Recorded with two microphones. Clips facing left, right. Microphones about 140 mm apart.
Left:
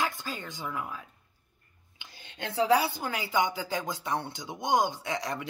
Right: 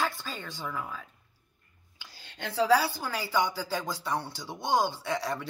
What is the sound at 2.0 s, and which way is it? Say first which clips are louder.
Speech: left 1 dB; 20° left (ahead or behind).